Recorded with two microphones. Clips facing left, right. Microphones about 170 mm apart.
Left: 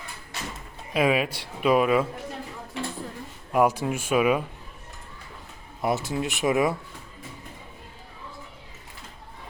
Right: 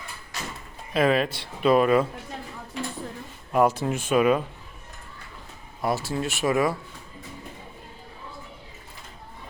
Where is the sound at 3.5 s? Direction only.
10° left (ahead or behind).